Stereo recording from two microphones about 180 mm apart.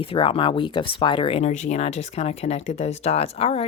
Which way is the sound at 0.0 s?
30° left (ahead or behind).